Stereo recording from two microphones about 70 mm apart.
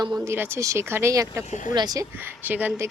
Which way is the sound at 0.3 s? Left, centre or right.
Right.